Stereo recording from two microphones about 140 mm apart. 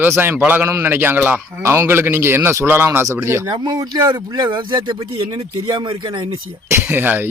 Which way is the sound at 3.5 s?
30° right (ahead or behind).